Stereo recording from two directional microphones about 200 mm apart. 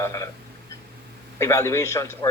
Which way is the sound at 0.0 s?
15° left (ahead or behind).